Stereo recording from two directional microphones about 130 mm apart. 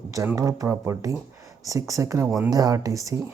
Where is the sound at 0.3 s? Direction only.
25° right (ahead or behind).